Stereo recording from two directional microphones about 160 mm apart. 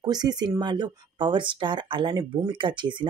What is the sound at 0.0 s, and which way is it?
Speech, 25° right (ahead or behind).